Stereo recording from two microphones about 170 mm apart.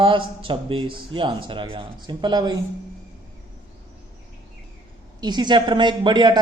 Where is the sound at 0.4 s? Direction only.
30° right (ahead or behind).